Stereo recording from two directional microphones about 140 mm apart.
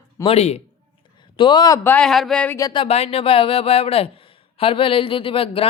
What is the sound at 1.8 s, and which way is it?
Speech, 10° left (ahead or behind).